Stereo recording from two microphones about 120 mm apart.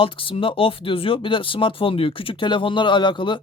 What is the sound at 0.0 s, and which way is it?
Speech, 45° left (ahead or behind).